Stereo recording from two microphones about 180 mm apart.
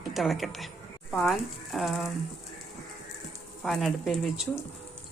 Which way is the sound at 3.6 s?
Centre (ahead or behind).